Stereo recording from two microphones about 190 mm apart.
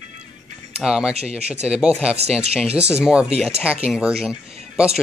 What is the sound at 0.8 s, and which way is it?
Speech, 5° right (ahead or behind).